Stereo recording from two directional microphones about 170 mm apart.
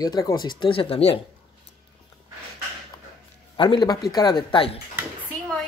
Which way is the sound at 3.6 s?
25° left (ahead or behind).